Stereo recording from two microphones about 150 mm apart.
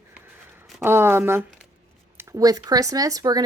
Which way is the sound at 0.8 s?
15° right (ahead or behind).